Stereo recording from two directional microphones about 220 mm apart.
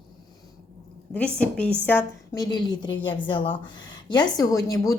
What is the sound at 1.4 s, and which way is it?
A woman's voice, 5° left (ahead or behind).